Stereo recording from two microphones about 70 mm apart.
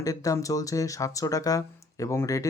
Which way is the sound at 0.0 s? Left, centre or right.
Left.